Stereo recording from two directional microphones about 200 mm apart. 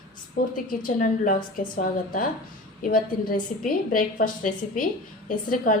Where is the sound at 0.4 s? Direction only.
45° left (ahead or behind).